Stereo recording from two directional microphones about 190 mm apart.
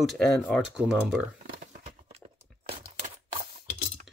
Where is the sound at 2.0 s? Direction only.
35° right (ahead or behind).